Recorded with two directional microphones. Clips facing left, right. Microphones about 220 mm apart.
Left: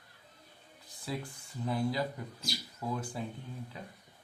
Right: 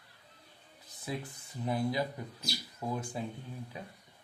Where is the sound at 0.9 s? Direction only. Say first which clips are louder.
Even; 20° right (ahead or behind).